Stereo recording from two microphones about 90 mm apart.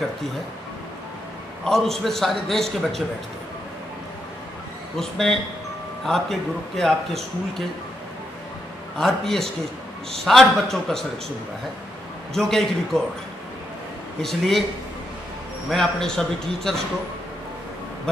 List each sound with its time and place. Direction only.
1.6 s a man's voice: 5° left (ahead or behind)
4.9 s a man's voice: 5° left (ahead or behind)
8.9 s a man's voice: 5° left (ahead or behind)
12.4 s a man's voice: 5° left (ahead or behind)
14.2 s a man's voice: 5° left (ahead or behind)
15.7 s a man's voice: 5° left (ahead or behind)